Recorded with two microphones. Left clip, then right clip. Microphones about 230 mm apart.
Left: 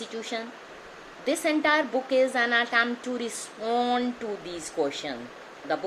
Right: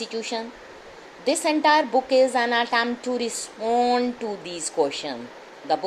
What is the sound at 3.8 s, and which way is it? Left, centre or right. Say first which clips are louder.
Speech: right 5 dB; right.